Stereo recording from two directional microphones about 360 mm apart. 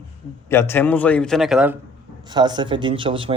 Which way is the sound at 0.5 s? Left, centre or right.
Centre.